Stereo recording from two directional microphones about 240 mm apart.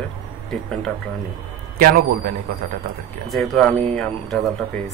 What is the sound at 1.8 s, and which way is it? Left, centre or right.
Speech, right.